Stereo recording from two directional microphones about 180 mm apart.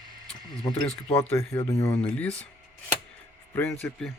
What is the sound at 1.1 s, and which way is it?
Speech, 15° left (ahead or behind).